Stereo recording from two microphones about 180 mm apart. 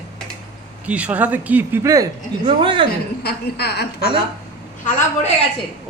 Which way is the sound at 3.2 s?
60° left (ahead or behind).